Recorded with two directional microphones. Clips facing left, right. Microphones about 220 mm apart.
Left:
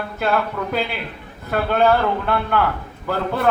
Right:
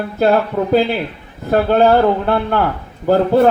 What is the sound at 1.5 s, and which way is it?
A man's voice, 35° right (ahead or behind).